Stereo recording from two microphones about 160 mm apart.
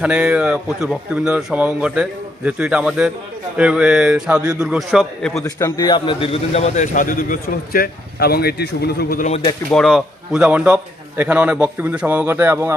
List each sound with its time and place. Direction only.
0.0 s speech: 5° right (ahead or behind)
5.4 s a man's voice: 20° left (ahead or behind); by 9.2 s 75° left (ahead or behind)
9.7 s a man's voice: centre (ahead or behind); by 12.7 s 15° right (ahead or behind)